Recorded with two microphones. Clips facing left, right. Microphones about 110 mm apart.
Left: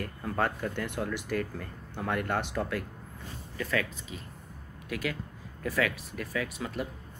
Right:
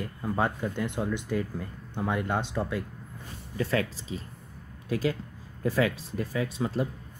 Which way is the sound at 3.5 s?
30° right (ahead or behind).